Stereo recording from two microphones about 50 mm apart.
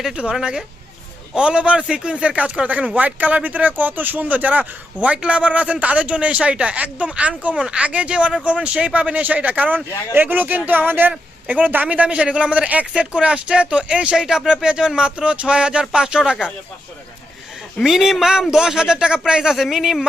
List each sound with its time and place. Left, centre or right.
0.2 s a man's voice: centre; by 11.1 s right
11.4 s a man's voice: right
17.8 s speech: centre